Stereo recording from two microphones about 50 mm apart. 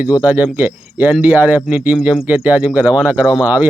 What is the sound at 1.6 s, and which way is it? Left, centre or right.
A man's voice, right.